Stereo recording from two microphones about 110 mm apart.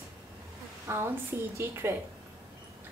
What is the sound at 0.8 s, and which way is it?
A woman's voice, 25° right (ahead or behind).